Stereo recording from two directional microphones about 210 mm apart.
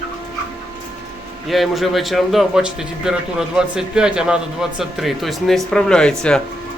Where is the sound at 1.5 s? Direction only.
Centre (ahead or behind).